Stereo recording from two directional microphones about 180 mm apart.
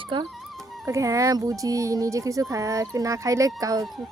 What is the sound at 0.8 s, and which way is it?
Speech, 15° right (ahead or behind).